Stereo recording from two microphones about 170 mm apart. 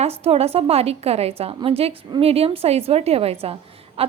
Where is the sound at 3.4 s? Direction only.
35° right (ahead or behind).